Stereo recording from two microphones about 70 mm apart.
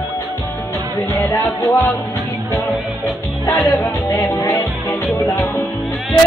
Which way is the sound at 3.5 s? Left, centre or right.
Left.